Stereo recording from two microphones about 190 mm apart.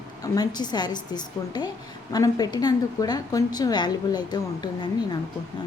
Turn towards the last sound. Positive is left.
turn(degrees=20)  # may be behind; listen again after turning